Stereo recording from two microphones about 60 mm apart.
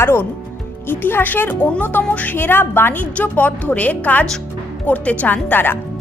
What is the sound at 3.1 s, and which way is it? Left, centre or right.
A woman's voice, left.